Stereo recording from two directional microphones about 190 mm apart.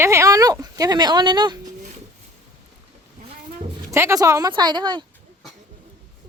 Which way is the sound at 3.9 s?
15° right (ahead or behind).